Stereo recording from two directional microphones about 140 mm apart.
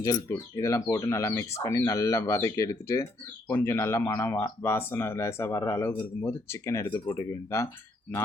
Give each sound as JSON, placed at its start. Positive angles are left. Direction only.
{"t": 0.0, "sound": "speech", "side_deg": 25}